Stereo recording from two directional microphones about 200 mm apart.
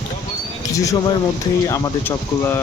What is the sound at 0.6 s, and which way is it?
Speech, 15° left (ahead or behind).